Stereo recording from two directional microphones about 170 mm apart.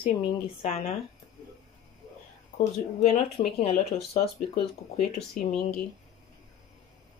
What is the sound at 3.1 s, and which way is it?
A woman's voice, 35° left (ahead or behind).